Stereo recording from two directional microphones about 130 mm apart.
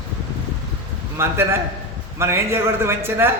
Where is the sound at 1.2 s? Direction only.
20° right (ahead or behind).